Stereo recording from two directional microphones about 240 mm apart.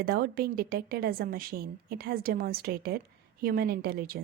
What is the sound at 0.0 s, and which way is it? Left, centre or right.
A woman's voice, right.